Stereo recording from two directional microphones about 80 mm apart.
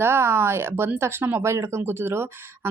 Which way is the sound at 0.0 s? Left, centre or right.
Right.